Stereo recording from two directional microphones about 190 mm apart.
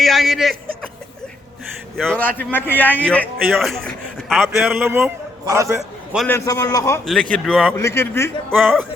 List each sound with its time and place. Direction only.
0.0 s a sound: centre (ahead or behind)
2.0 s a man's voice: 5° left (ahead or behind); by 5.7 s 15° right (ahead or behind)
6.2 s a man's voice: 15° left (ahead or behind)
7.0 s speech: 5° left (ahead or behind)
7.8 s a man's voice: 15° left (ahead or behind)
8.5 s speech: centre (ahead or behind)